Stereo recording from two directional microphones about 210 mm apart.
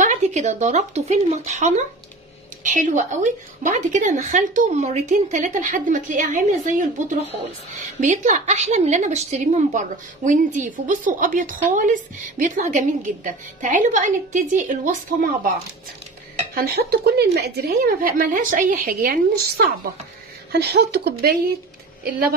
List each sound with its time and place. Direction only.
0.0 s a woman's voice: 35° right (ahead or behind)
16.5 s a woman's voice: 45° right (ahead or behind)